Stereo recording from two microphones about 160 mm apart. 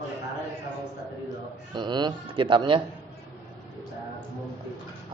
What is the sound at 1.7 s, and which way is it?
Speech, 30° right (ahead or behind).